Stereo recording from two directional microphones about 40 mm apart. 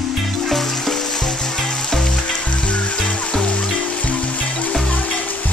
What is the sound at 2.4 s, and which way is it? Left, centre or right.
Frying, left.